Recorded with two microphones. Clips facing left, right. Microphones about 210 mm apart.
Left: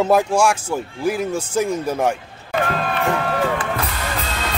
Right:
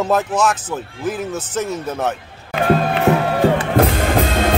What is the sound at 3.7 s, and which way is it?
Music, 50° right (ahead or behind).